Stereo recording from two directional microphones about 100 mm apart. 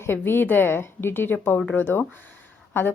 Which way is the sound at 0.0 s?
20° left (ahead or behind).